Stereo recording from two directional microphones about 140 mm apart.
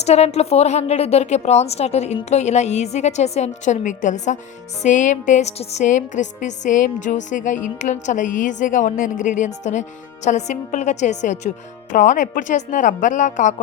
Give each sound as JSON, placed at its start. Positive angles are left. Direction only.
{"t": 0.0, "sound": "a woman's voice", "side_deg": 50}